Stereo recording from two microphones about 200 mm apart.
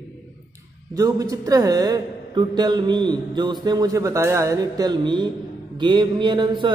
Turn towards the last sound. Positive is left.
turn(degrees=-20)  # may be behind; listen again after turning